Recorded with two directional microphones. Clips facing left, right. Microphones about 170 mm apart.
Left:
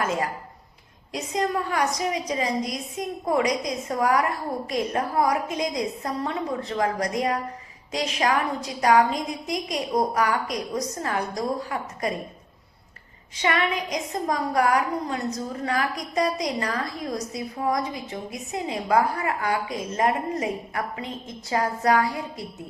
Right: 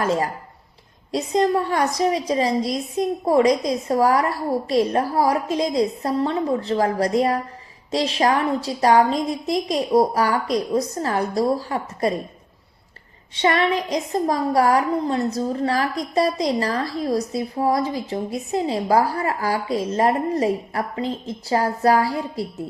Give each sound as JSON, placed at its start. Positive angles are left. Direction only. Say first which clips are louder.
{"t": 0.0, "sound": "a woman's voice", "louder": "right 5 dB", "side_deg": -35}
{"t": 13.3, "sound": "a woman's voice", "louder": "right 5 dB", "side_deg": -35}